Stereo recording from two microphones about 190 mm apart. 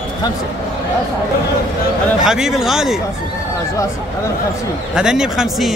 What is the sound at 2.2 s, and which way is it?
Speech, centre (ahead or behind).